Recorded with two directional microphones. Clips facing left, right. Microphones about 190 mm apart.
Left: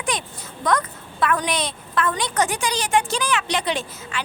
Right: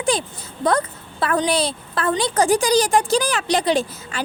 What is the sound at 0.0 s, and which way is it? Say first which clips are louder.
A woman's voice: right 6 dB; 30° right (ahead or behind).